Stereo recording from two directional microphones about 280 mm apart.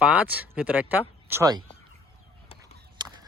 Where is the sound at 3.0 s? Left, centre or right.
Centre.